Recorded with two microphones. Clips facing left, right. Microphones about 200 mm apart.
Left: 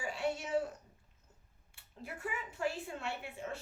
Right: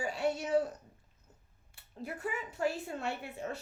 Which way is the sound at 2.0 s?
40° right (ahead or behind).